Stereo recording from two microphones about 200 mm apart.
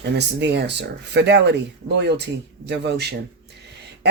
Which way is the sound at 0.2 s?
60° right (ahead or behind).